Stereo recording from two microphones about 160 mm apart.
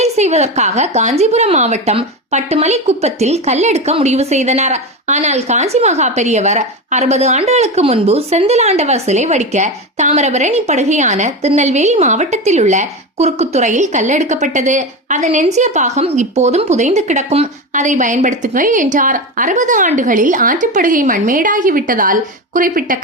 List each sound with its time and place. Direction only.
0.0 s a woman's voice: 45° right (ahead or behind); by 23.0 s 60° right (ahead or behind)